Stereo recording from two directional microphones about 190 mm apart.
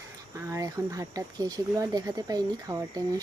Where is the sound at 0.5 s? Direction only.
15° right (ahead or behind).